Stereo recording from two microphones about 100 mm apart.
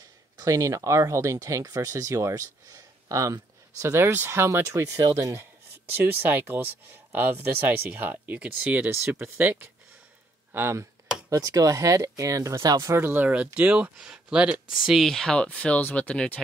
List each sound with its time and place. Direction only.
0.4 s speech: 35° right (ahead or behind)
12.9 s speech: 20° right (ahead or behind); by 16.3 s 10° left (ahead or behind)